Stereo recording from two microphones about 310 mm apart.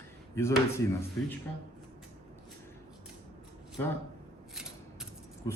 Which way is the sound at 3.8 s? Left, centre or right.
Centre.